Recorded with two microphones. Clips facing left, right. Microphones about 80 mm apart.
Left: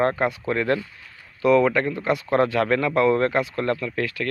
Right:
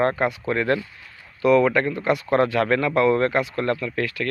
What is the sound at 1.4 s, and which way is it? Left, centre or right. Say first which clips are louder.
Speech: right 1 dB; left.